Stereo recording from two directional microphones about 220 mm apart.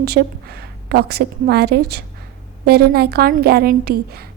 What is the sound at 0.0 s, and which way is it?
A woman's voice, 45° right (ahead or behind).